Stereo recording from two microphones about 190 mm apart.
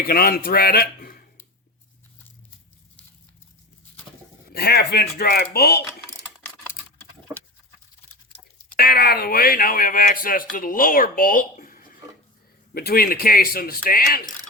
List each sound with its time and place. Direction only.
0.1 s speech: 50° left (ahead or behind)
4.4 s speech: 55° left (ahead or behind)
8.3 s speech: 50° left (ahead or behind)